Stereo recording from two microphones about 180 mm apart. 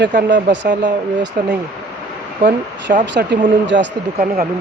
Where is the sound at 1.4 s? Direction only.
60° right (ahead or behind).